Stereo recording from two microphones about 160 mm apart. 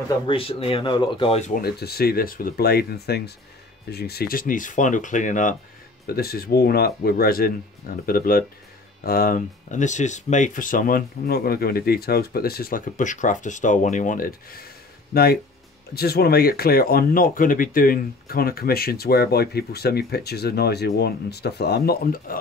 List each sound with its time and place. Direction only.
0.3 s speech: 35° left (ahead or behind)
1.6 s speech: 75° left (ahead or behind); by 5.6 s 55° left (ahead or behind)
6.0 s speech: 70° left (ahead or behind)
15.9 s speech: 75° left (ahead or behind)